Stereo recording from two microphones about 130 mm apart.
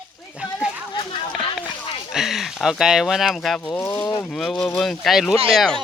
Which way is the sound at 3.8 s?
20° left (ahead or behind).